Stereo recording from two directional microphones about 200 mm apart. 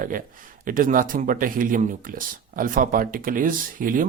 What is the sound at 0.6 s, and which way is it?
Speech, 40° right (ahead or behind).